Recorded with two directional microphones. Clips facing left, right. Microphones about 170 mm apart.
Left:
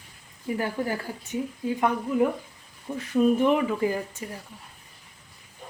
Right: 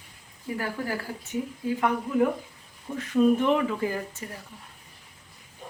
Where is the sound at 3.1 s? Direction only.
15° left (ahead or behind).